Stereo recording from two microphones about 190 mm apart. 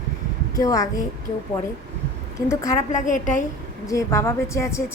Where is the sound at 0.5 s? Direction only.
20° left (ahead or behind).